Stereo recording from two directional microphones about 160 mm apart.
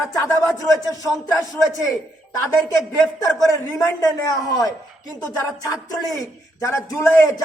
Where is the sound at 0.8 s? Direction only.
20° left (ahead or behind).